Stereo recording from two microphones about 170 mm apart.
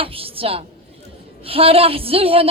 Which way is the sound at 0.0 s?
35° right (ahead or behind).